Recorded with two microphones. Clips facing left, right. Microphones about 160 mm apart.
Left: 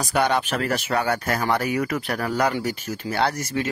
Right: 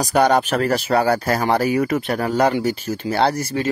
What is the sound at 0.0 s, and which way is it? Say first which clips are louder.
Speech: right 6 dB; 40° right (ahead or behind).